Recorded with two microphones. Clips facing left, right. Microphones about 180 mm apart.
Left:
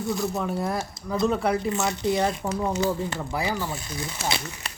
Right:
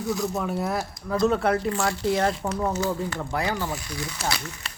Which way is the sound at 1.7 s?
20° left (ahead or behind).